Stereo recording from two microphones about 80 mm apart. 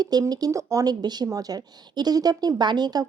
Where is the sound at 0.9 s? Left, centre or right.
Right.